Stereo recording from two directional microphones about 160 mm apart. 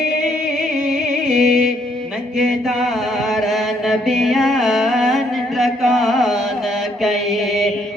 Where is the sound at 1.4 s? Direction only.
Centre (ahead or behind).